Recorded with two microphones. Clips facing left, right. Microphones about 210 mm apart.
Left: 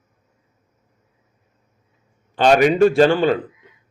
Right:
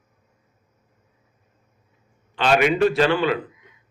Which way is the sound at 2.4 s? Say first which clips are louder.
Left 5 dB; 40° left (ahead or behind).